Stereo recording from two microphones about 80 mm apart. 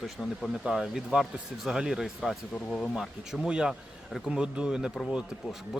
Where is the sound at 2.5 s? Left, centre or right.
Centre.